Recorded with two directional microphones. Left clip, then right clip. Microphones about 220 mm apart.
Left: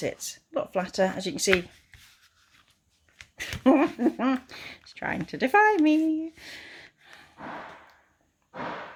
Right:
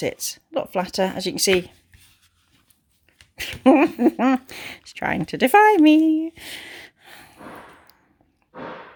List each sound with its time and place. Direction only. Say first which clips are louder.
0.0 s speech: right 6 dB; 40° right (ahead or behind)
3.6 s speech: right 6 dB; 40° right (ahead or behind)